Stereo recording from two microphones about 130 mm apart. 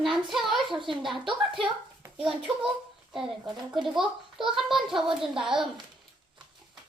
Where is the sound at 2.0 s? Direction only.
20° right (ahead or behind).